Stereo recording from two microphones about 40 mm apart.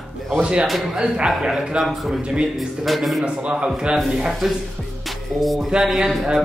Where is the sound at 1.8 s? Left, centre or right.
Centre.